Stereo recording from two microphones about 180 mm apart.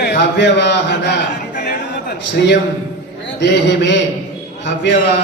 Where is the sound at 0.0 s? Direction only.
70° left (ahead or behind).